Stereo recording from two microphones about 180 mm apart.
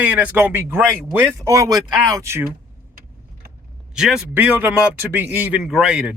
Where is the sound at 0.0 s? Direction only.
10° right (ahead or behind).